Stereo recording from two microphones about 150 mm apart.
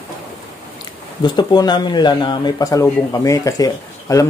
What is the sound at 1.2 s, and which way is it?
Speech, 30° left (ahead or behind).